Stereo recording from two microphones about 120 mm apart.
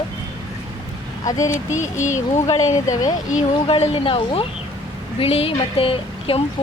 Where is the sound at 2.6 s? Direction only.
25° left (ahead or behind).